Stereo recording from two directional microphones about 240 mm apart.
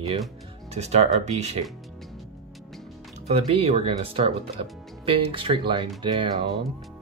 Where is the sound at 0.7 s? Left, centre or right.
Right.